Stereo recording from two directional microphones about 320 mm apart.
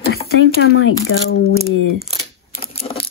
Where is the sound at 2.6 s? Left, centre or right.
Centre.